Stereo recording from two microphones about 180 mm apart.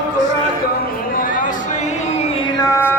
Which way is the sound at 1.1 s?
50° left (ahead or behind).